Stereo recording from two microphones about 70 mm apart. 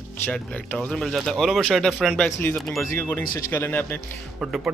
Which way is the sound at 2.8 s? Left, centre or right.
Left.